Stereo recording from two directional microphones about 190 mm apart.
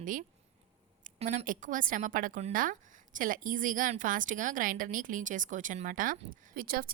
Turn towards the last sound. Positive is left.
turn(degrees=-50)  # may be behind; listen again after turning